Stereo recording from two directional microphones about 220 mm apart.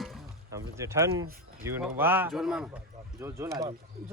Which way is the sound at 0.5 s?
15° right (ahead or behind).